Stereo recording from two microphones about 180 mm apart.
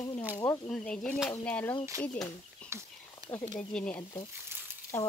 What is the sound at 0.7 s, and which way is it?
Speech, 5° left (ahead or behind).